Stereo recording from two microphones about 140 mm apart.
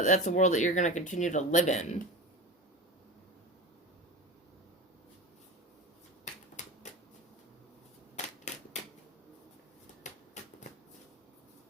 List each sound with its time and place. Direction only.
0.0 s speech: 60° left (ahead or behind)
6.6 s shuffling cards: 60° left (ahead or behind)
8.1 s shuffling cards: 55° left (ahead or behind)
10.0 s typewriter: 60° left (ahead or behind)